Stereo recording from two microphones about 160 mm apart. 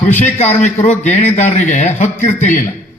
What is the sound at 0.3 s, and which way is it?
A man's voice, 45° left (ahead or behind).